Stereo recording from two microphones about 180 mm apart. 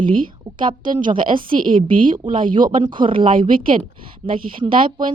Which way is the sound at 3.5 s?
50° right (ahead or behind).